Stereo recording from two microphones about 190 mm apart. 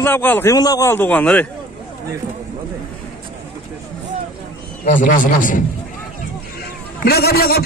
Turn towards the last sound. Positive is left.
turn(degrees=55)  # may be behind; listen again after turning